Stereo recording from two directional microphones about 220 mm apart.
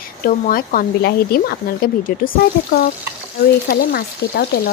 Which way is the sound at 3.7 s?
45° left (ahead or behind).